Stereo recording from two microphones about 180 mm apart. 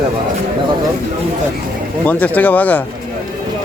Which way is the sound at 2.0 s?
10° left (ahead or behind).